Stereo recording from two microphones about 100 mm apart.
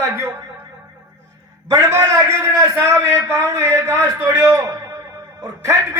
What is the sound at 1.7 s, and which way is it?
A man's voice, 30° right (ahead or behind).